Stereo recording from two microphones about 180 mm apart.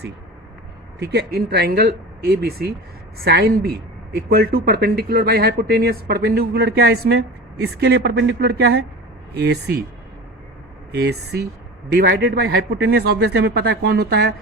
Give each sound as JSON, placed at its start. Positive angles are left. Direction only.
{"t": 0.9, "sound": "speech", "side_deg": -65}
{"t": 10.9, "sound": "speech", "side_deg": -65}